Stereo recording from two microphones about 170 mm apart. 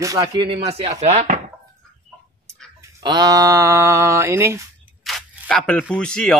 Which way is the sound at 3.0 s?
25° right (ahead or behind).